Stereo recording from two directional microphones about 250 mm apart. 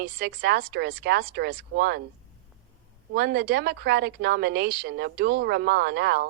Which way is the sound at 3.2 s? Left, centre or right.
Right.